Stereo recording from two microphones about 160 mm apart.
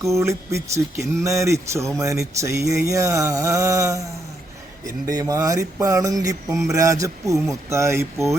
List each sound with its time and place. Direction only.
0.0 s speech: 20° right (ahead or behind)
5.0 s speech: 20° right (ahead or behind)